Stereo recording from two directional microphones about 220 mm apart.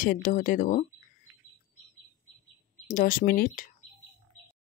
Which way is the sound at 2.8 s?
35° left (ahead or behind).